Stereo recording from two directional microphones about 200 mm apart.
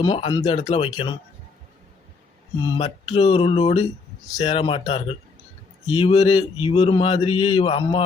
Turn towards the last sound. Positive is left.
turn(degrees=25)  # may be behind; listen again after turning